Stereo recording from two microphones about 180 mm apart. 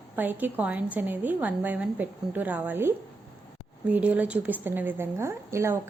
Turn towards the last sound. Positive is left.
turn(degrees=-15)  # may be behind; listen again after turning